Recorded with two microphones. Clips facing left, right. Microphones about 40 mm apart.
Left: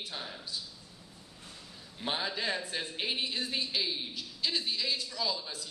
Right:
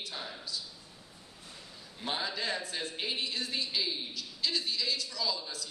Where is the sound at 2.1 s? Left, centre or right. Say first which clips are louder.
Left 1 dB; centre.